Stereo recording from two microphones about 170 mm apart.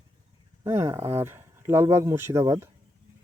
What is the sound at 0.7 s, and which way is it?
Speech, 15° right (ahead or behind).